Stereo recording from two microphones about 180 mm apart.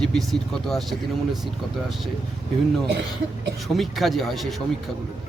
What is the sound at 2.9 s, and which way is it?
Speech, 75° right (ahead or behind).